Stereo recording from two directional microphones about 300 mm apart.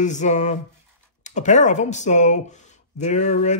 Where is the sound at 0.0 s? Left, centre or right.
Left.